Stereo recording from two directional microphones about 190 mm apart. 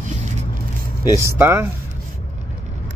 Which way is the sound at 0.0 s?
40° right (ahead or behind).